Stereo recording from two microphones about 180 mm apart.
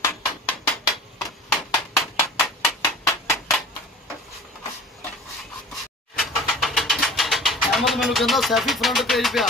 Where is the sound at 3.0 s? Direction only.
15° left (ahead or behind).